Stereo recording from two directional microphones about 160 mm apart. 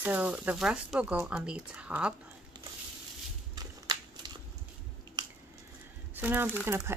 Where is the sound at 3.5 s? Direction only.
25° right (ahead or behind).